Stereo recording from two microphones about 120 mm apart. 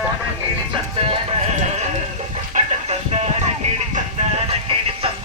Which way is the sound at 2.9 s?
60° right (ahead or behind).